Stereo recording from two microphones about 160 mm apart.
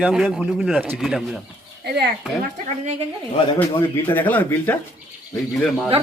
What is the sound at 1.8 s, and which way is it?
Speech, 90° right.